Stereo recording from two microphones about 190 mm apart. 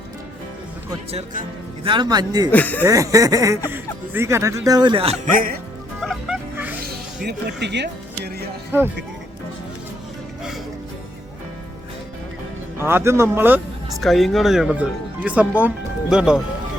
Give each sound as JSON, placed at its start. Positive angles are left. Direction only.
{"t": 1.1, "sound": "speech", "side_deg": -45}
{"t": 1.8, "sound": "a man's voice", "side_deg": -25}
{"t": 2.5, "sound": "speech", "side_deg": 10}
{"t": 2.8, "sound": "speech", "side_deg": -15}
{"t": 5.2, "sound": "speech", "side_deg": -45}
{"t": 6.0, "sound": "music", "side_deg": -5}
{"t": 7.3, "sound": "speech", "side_deg": -65}
{"t": 12.8, "sound": "speech", "side_deg": -15}
{"t": 14.0, "sound": "speech", "side_deg": 0}